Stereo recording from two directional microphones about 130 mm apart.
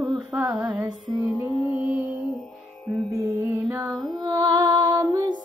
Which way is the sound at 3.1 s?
20° right (ahead or behind).